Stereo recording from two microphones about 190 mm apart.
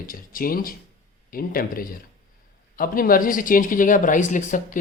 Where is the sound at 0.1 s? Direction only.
50° left (ahead or behind).